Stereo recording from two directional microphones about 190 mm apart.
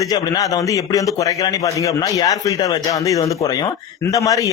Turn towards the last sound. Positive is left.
turn(degrees=15)  # may be behind; listen again after turning